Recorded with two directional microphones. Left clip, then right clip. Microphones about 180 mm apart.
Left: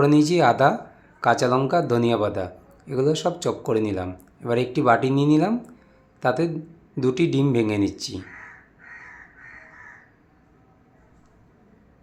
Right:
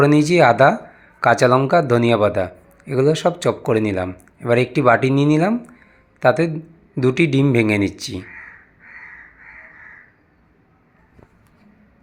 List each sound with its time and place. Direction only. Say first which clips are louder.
0.0 s a man's voice: right 5 dB; 20° right (ahead or behind)